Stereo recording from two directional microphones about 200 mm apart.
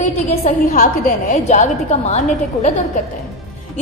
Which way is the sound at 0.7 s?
45° left (ahead or behind).